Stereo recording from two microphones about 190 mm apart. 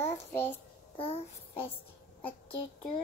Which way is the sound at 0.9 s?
30° left (ahead or behind).